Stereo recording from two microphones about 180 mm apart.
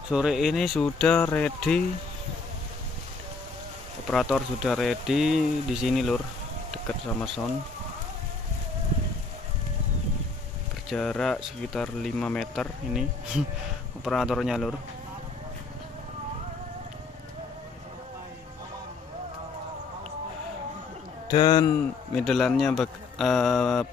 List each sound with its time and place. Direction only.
0.1 s speech: 5° right (ahead or behind)
4.1 s speech: centre (ahead or behind)
10.9 s speech: 5° left (ahead or behind)
21.3 s a man's voice: 25° left (ahead or behind)
22.1 s speech: centre (ahead or behind)